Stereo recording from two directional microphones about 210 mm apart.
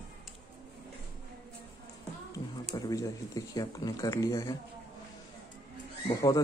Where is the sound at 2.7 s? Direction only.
15° left (ahead or behind).